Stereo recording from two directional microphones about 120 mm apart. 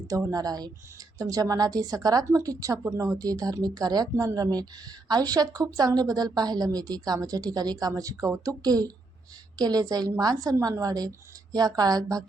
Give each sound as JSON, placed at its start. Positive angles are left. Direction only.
{"t": 0.1, "sound": "speech", "side_deg": -30}